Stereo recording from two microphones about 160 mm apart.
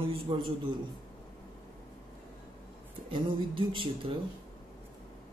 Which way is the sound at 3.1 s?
30° right (ahead or behind).